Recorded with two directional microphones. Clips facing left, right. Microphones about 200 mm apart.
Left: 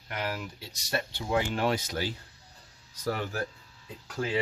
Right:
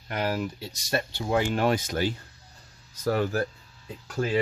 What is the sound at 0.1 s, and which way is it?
Speech, 40° right (ahead or behind).